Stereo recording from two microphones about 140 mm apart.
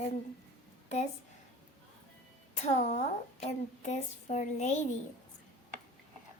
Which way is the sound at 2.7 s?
55° left (ahead or behind).